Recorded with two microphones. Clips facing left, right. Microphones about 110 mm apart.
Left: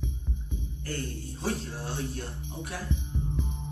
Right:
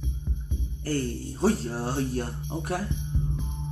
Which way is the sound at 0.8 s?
40° right (ahead or behind).